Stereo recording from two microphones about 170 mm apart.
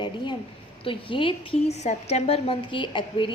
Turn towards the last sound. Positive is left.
turn(degrees=30)  # may be behind; listen again after turning